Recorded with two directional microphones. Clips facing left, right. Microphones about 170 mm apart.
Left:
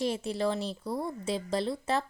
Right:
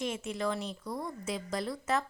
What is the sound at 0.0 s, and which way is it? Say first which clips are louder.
A woman's voice: left 4 dB; 35° left (ahead or behind).